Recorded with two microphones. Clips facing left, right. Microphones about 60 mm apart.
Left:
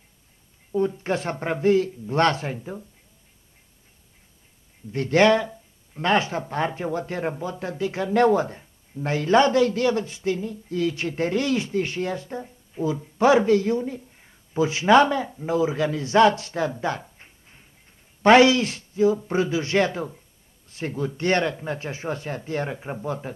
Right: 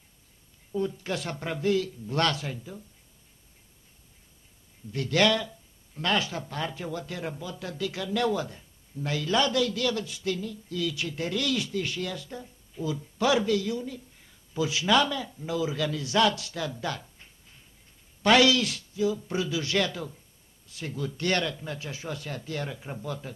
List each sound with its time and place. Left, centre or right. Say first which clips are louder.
0.7 s speech: left 6 dB; left
4.9 s speech: left 6 dB; left